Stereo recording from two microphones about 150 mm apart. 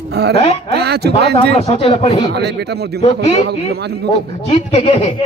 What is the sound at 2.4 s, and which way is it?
Speech, 90° right.